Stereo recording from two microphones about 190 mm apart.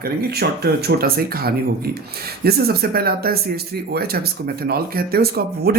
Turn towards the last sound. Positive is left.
turn(degrees=-55)  # may be behind; listen again after turning